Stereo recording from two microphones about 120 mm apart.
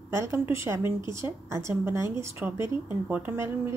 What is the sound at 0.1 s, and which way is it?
A woman's voice, 25° right (ahead or behind).